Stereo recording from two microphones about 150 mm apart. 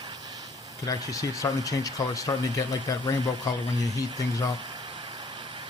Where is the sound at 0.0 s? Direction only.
30° right (ahead or behind).